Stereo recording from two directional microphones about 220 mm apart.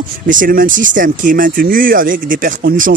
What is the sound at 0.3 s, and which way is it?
Speech, 40° right (ahead or behind).